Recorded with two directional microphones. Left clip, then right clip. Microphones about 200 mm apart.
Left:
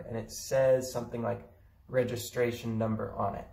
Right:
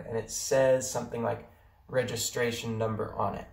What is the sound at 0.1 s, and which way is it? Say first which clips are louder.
Speech: right 3 dB; 10° right (ahead or behind).